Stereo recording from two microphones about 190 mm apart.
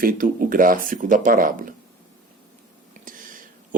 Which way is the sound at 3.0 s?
45° right (ahead or behind).